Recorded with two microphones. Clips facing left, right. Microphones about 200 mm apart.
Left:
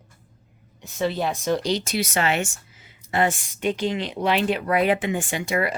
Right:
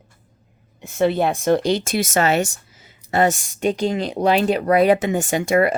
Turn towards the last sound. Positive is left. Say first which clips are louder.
# right 7 dB
turn(degrees=-50)  # may be behind; listen again after turning